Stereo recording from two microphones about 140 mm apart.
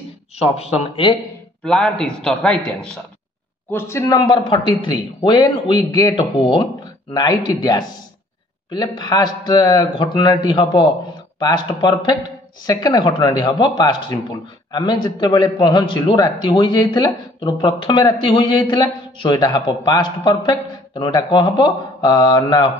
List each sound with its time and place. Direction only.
0.4 s speech: 45° left (ahead or behind)
1.6 s a man's voice: 5° left (ahead or behind)
3.7 s a man's voice: 20° left (ahead or behind)